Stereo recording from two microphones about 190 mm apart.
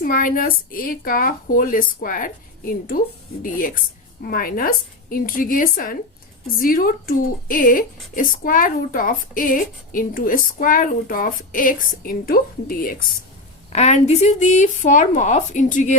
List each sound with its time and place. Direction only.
0.0 s speech: 45° left (ahead or behind)
4.2 s speech: 50° left (ahead or behind)
13.7 s speech: 35° left (ahead or behind)